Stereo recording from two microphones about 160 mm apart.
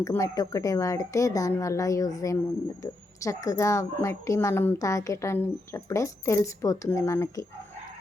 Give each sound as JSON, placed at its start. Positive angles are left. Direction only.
{"t": 0.0, "sound": "a woman's voice", "side_deg": 20}